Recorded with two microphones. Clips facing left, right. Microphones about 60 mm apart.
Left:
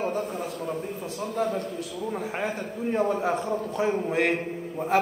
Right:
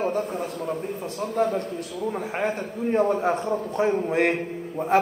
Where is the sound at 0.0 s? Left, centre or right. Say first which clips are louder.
Right 3 dB; right.